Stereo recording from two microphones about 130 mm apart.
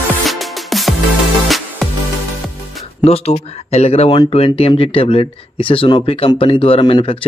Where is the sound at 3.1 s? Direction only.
55° left (ahead or behind).